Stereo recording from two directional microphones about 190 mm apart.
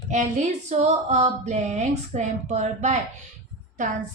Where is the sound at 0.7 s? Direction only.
35° right (ahead or behind).